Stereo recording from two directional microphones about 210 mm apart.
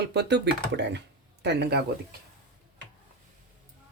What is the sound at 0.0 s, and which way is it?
Speech, 50° right (ahead or behind).